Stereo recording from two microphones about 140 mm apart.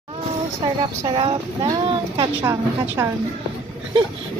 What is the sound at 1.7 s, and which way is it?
A woman's voice, 30° right (ahead or behind).